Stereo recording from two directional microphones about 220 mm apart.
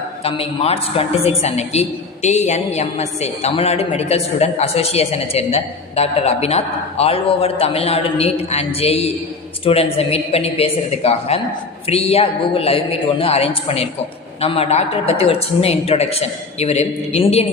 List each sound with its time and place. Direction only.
0.3 s a woman's voice: 25° left (ahead or behind)